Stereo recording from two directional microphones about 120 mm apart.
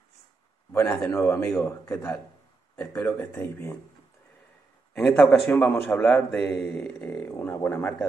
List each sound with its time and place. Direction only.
1.1 s a man's voice: 20° left (ahead or behind)
4.9 s a man's voice: 10° left (ahead or behind)